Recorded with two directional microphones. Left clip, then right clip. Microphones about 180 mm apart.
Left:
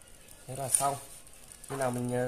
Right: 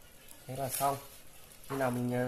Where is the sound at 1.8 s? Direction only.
25° left (ahead or behind).